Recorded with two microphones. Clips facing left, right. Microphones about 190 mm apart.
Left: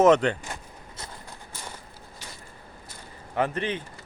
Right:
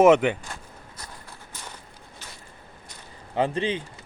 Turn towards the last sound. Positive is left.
turn(degrees=-25)  # may be behind; listen again after turning